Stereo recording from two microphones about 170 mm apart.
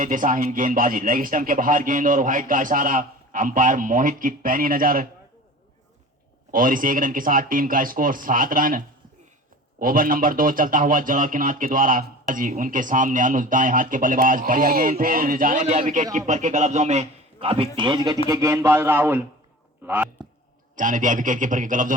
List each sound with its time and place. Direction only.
0.0 s speech: 50° right (ahead or behind)
6.5 s speech: 55° right (ahead or behind)
9.8 s speech: 55° right (ahead or behind); by 20.1 s 10° right (ahead or behind)
20.7 s speech: 50° right (ahead or behind)